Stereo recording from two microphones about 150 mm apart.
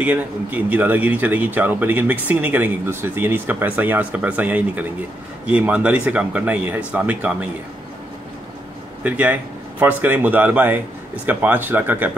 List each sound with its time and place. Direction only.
0.0 s speech: 10° right (ahead or behind)
9.0 s speech: 10° right (ahead or behind)